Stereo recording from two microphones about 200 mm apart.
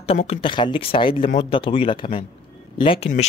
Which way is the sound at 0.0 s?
30° left (ahead or behind).